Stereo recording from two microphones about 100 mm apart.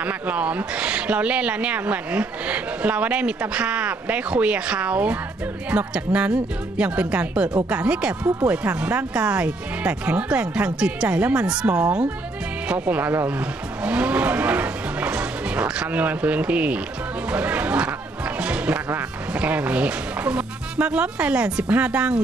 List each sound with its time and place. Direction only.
0.0 s speech: 15° right (ahead or behind)